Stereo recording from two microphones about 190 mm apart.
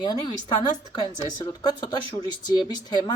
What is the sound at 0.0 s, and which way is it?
Speech, 20° left (ahead or behind).